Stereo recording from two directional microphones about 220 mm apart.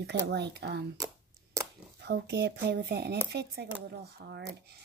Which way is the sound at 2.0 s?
50° right (ahead or behind).